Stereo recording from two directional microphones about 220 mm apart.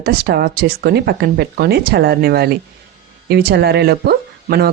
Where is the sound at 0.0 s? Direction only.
45° right (ahead or behind).